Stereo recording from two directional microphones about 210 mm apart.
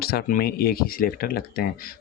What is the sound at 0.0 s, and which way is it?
Speech, 45° left (ahead or behind).